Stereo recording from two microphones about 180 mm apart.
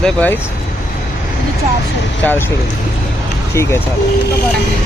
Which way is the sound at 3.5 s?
15° left (ahead or behind).